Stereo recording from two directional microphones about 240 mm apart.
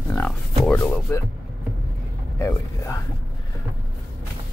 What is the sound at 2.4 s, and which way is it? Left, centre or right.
Speech, centre.